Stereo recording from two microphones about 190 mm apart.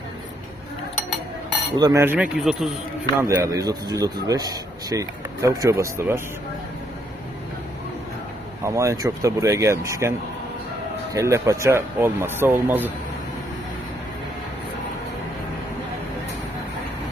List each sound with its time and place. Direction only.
1.7 s speech: 20° right (ahead or behind); by 2.7 s centre (ahead or behind)
3.2 s speech: 15° right (ahead or behind)
8.6 s speech: 15° right (ahead or behind)